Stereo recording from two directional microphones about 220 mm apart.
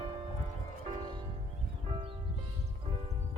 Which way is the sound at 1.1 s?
20° right (ahead or behind).